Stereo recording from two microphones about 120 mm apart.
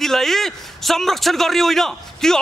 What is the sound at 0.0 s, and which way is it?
A man's voice, centre (ahead or behind).